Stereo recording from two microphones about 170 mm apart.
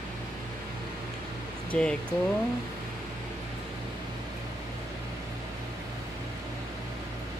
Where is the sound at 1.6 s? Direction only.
5° left (ahead or behind).